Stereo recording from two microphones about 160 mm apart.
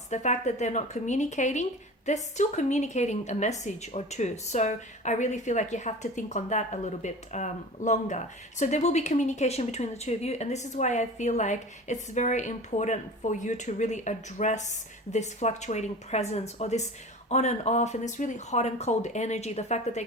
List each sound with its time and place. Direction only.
0.1 s a woman's voice: 50° left (ahead or behind)